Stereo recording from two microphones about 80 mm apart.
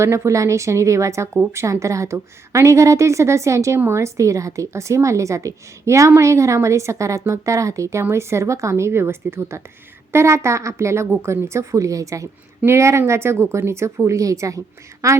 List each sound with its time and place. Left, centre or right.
0.0 s a woman's voice: right